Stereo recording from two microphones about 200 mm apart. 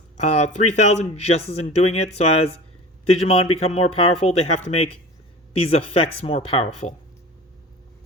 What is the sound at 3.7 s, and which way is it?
Speech, 35° left (ahead or behind).